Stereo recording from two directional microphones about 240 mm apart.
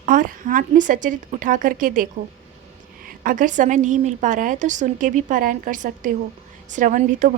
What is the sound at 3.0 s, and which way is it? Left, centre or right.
A woman's voice, right.